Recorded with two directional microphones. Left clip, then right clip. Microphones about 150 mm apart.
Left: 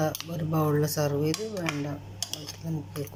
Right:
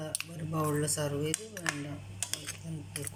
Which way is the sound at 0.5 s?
10° left (ahead or behind).